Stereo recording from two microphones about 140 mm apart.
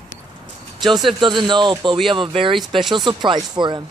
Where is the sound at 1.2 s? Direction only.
35° right (ahead or behind).